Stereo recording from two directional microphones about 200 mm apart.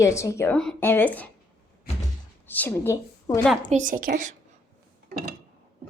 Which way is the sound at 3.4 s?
5° left (ahead or behind).